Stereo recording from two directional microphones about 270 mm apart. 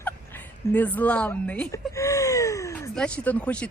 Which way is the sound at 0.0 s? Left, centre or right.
Centre.